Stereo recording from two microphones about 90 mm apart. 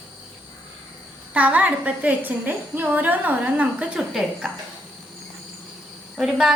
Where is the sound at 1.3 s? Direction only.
15° right (ahead or behind).